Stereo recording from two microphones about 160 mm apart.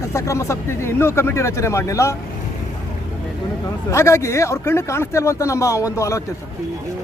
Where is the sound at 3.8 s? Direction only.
20° left (ahead or behind).